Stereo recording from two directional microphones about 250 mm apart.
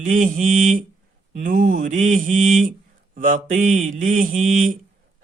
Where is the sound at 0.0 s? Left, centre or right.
Right.